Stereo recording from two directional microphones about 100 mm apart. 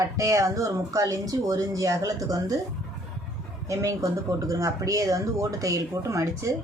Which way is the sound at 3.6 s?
30° right (ahead or behind).